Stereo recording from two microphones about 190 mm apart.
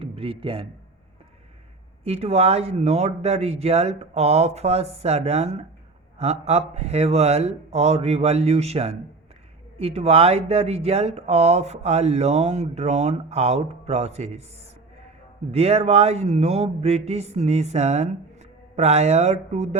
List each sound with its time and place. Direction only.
0.0 s speech: 30° right (ahead or behind)
2.0 s speech: 35° right (ahead or behind)
15.5 s speech: 35° right (ahead or behind)